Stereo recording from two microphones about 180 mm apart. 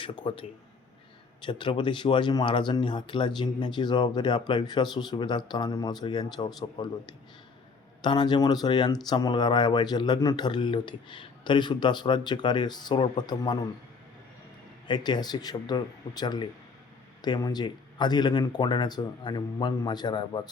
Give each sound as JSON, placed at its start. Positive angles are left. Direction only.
{"t": 0.0, "sound": "speech", "side_deg": 30}
{"t": 14.8, "sound": "speech", "side_deg": 25}